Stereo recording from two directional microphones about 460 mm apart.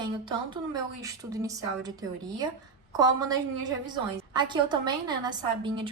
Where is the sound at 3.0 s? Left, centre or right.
Centre.